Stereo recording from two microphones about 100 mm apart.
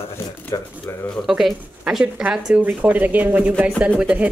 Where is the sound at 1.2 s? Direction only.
5° right (ahead or behind).